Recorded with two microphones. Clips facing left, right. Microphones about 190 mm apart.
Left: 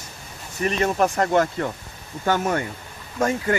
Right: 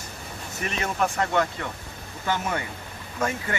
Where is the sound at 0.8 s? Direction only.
40° left (ahead or behind).